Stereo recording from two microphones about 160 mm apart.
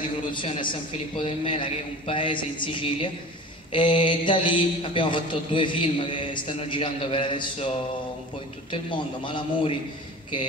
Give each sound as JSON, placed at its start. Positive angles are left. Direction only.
{"t": 0.3, "sound": "a man's voice", "side_deg": 30}